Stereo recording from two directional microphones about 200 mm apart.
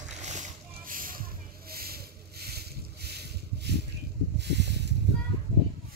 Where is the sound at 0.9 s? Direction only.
45° right (ahead or behind).